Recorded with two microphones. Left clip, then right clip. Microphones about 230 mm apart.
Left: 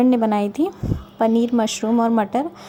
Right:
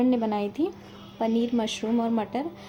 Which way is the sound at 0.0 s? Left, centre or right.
Left.